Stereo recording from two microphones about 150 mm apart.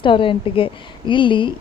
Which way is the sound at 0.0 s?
35° left (ahead or behind).